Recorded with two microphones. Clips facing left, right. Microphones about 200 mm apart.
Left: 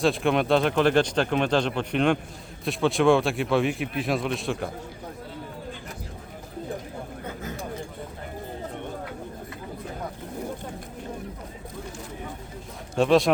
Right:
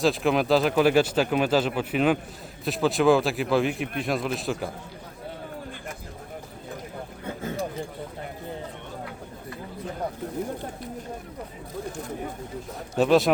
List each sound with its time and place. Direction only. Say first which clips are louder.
0.0 s speech: even; centre (ahead or behind)
13.0 s speech: even; 5° right (ahead or behind)